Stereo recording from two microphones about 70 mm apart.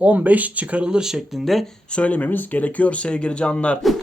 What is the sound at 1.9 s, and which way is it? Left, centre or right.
Speech, centre.